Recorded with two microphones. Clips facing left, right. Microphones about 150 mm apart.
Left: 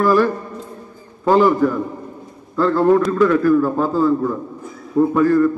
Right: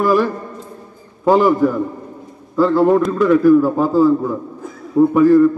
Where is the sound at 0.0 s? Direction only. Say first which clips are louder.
Even; 10° right (ahead or behind).